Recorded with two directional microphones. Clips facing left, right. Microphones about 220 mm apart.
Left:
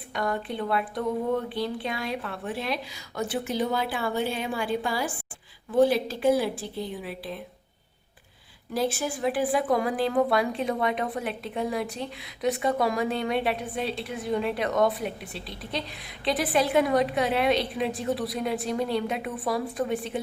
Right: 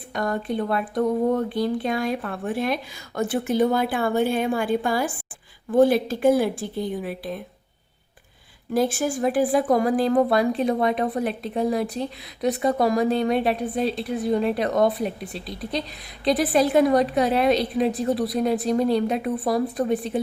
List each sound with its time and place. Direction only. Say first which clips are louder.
0.1 s speech: right 4 dB; 45° right (ahead or behind)
8.7 s a woman's voice: right 5 dB; 50° right (ahead or behind)